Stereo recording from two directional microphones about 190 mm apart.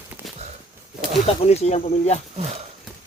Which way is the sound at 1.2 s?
30° left (ahead or behind).